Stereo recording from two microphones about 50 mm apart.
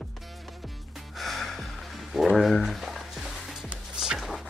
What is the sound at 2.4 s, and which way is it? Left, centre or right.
Music, centre.